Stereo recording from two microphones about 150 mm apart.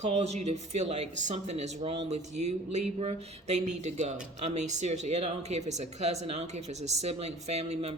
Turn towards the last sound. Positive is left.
turn(degrees=-45)  # may be behind; listen again after turning